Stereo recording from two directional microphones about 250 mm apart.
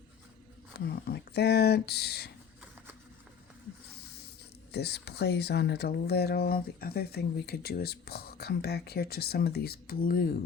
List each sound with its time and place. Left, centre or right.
0.9 s speech: left
4.7 s speech: left